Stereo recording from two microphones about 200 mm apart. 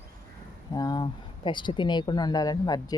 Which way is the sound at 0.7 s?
20° left (ahead or behind).